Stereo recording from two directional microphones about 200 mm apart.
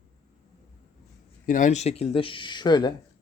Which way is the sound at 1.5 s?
40° left (ahead or behind).